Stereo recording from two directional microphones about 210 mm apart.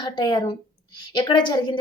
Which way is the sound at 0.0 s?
20° left (ahead or behind).